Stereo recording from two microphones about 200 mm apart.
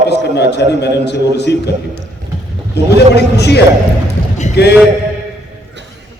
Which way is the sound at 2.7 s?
55° left (ahead or behind).